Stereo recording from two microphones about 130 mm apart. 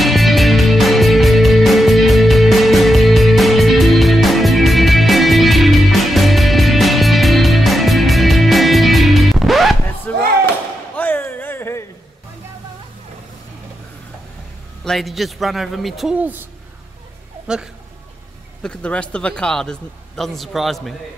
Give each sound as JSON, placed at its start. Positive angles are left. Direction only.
{"t": 0.0, "sound": "music", "side_deg": 0}
{"t": 10.1, "sound": "slam", "side_deg": 10}
{"t": 11.0, "sound": "a sound", "side_deg": 15}
{"t": 14.9, "sound": "a man's voice", "side_deg": 0}
{"t": 16.2, "sound": "speech", "side_deg": -10}
{"t": 17.5, "sound": "a man's voice", "side_deg": -5}
{"t": 18.6, "sound": "a man's voice", "side_deg": 10}